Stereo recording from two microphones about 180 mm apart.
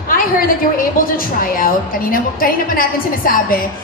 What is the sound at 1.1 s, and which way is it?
A woman's voice, 50° left (ahead or behind).